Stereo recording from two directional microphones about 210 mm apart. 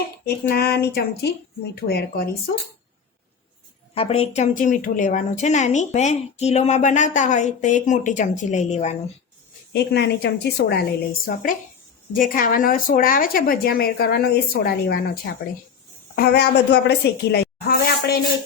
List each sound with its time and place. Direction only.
0.3 s speech: 50° left (ahead or behind)
3.9 s a woman's voice: 25° left (ahead or behind)
9.7 s speech: 50° left (ahead or behind)
12.1 s speech: 40° left (ahead or behind)
16.1 s speech: 50° left (ahead or behind)